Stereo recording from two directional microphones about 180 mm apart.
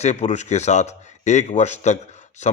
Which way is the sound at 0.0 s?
40° left (ahead or behind).